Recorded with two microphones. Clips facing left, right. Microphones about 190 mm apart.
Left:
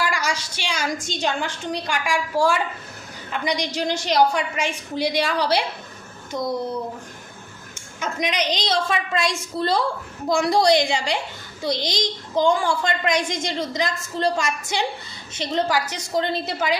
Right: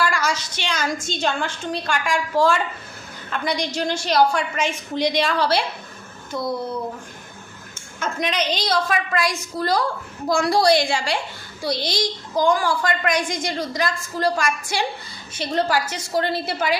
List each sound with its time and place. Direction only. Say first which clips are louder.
0.0 s a woman's voice: right 2 dB; 15° left (ahead or behind)
7.9 s a woman's voice: right 1 dB; 15° left (ahead or behind)